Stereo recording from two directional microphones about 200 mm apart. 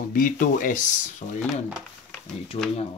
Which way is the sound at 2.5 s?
30° left (ahead or behind).